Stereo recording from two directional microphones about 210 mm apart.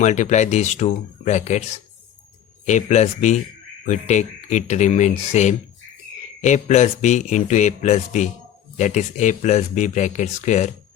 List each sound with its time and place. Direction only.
0.0 s a man's voice: 35° left (ahead or behind)
2.6 s a man's voice: 35° left (ahead or behind)